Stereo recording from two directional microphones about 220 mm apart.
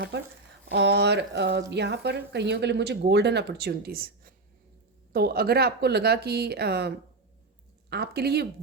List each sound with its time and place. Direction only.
0.1 s speech: 50° right (ahead or behind)